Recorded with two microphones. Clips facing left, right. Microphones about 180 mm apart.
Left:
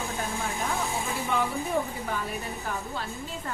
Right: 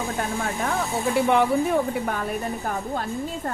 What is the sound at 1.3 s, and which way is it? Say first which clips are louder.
Speech: right 6 dB; 70° right (ahead or behind).